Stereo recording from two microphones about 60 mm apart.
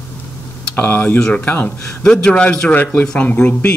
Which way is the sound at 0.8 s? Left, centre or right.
Left.